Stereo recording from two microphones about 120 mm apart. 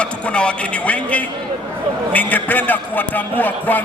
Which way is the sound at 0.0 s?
10° left (ahead or behind).